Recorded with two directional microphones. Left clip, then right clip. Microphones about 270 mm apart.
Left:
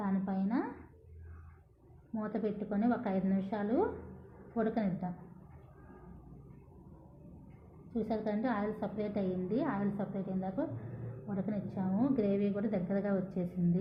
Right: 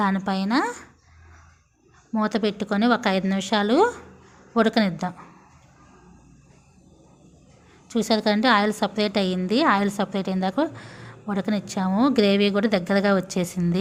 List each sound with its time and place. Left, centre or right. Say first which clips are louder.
0.0 s a woman's voice: right 14 dB; right
2.1 s a woman's voice: right 13 dB; right
7.9 s a woman's voice: right 14 dB; right